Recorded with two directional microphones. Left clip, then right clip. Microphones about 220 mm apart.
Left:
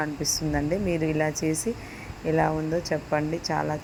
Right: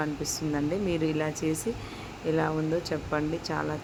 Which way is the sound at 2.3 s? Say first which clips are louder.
Left 3 dB; 15° left (ahead or behind).